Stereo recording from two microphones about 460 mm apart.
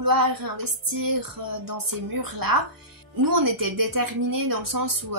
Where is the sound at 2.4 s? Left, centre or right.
Right.